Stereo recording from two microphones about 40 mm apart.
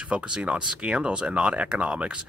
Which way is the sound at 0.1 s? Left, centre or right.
Right.